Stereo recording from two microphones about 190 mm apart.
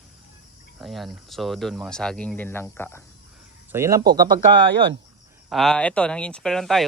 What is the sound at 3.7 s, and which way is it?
Speech, 15° right (ahead or behind).